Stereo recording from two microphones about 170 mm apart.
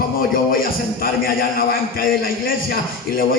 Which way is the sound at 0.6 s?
60° left (ahead or behind).